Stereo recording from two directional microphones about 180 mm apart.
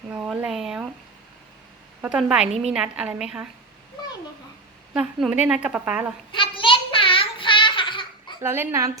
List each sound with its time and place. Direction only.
0.1 s a woman's voice: 5° right (ahead or behind)
2.0 s a woman's voice: 5° right (ahead or behind)
4.9 s a woman's voice: 5° right (ahead or behind)
6.3 s a sound: 30° left (ahead or behind)
8.4 s a woman's voice: 15° right (ahead or behind)